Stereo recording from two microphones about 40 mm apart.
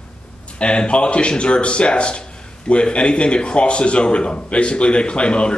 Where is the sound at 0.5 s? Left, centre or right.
Left.